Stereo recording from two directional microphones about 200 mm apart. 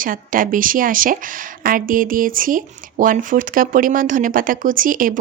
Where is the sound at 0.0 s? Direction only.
45° right (ahead or behind).